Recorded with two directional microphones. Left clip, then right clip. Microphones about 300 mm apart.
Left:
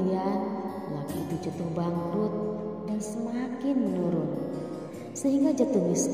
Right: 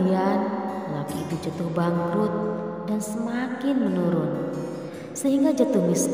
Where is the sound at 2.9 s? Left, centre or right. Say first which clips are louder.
Right 5 dB; centre.